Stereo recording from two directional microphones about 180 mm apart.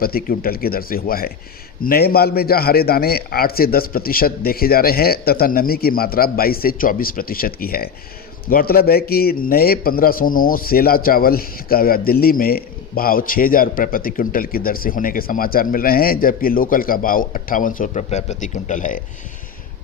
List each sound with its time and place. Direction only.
0.0 s a man's voice: 55° left (ahead or behind)